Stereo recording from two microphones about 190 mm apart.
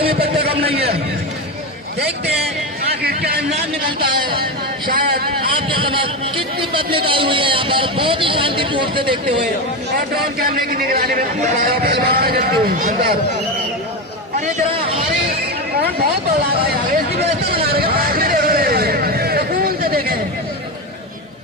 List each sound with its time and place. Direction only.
0.0 s a sound: 55° right (ahead or behind)
2.9 s a sound: 55° right (ahead or behind)
3.8 s speech: 25° right (ahead or behind)
4.9 s a man's voice: 50° right (ahead or behind)
5.5 s speech: 25° right (ahead or behind)
10.3 s a man's voice: 50° right (ahead or behind)
16.6 s hubbub: 55° right (ahead or behind)